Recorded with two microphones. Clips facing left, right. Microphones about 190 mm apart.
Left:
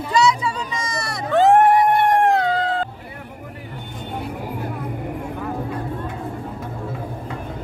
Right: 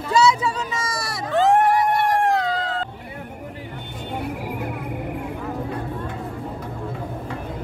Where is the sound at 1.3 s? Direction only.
55° left (ahead or behind).